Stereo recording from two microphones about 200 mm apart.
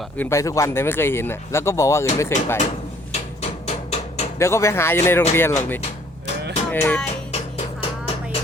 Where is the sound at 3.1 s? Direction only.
30° left (ahead or behind).